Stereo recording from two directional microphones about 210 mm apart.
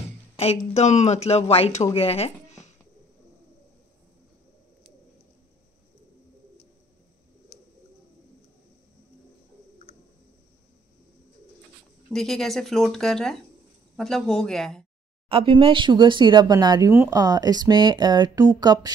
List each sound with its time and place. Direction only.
0.7 s speech: 30° left (ahead or behind)
12.1 s speech: centre (ahead or behind)
15.2 s speech: 25° right (ahead or behind)